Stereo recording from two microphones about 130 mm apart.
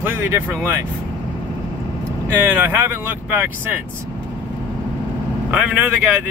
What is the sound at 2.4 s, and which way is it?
Speech, 15° right (ahead or behind).